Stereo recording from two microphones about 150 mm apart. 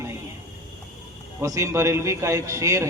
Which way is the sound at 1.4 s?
20° right (ahead or behind).